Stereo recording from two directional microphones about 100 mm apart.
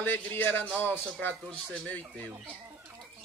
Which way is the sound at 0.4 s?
20° left (ahead or behind).